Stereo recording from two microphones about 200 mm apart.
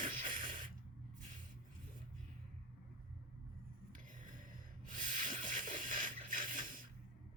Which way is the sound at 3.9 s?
40° right (ahead or behind).